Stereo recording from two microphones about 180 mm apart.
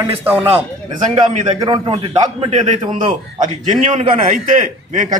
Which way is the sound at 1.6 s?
25° right (ahead or behind).